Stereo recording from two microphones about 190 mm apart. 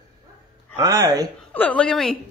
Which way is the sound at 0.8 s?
20° right (ahead or behind).